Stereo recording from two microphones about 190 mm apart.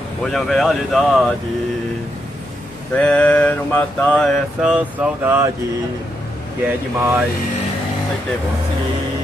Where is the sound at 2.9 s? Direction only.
5° left (ahead or behind); by 5.5 s 10° right (ahead or behind).